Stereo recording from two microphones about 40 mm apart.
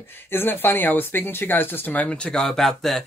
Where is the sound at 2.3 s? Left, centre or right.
Centre.